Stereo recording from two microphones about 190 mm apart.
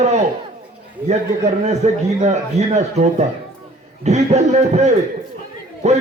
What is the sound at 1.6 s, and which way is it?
A man's voice, 35° right (ahead or behind).